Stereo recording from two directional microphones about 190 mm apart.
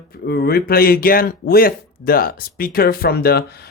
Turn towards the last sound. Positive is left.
turn(degrees=60)  # may be behind; listen again after turning